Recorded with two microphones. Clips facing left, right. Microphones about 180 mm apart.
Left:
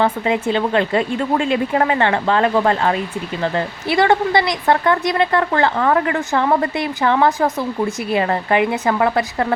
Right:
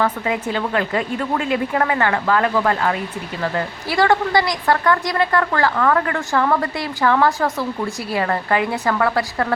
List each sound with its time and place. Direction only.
0.0 s speech: 25° left (ahead or behind)